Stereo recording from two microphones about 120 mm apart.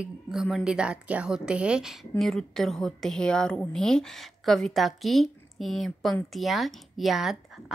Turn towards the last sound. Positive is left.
turn(degrees=-5)  # may be behind; listen again after turning